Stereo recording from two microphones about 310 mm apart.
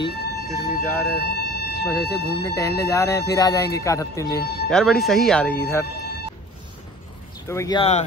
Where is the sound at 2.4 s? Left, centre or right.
Centre.